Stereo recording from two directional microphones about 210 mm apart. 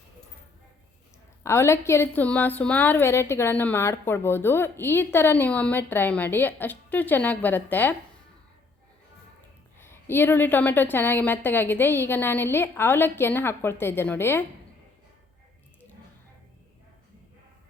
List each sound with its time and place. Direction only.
1.5 s a woman's voice: 10° left (ahead or behind)
9.7 s a woman's voice: 10° left (ahead or behind)